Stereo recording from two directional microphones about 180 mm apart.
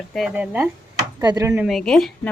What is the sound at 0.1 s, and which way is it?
Speech, 5° right (ahead or behind).